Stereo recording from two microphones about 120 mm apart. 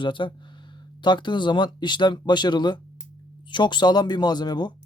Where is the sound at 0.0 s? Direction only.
40° left (ahead or behind).